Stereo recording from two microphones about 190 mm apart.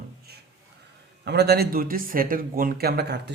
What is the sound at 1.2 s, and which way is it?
Speech, 60° right (ahead or behind).